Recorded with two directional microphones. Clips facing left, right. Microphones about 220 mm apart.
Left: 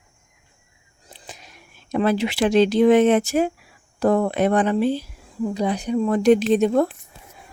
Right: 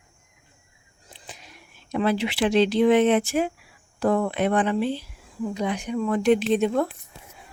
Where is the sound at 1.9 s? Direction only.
45° left (ahead or behind).